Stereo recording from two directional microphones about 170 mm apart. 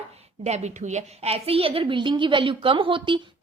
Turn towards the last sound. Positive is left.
turn(degrees=-30)  # may be behind; listen again after turning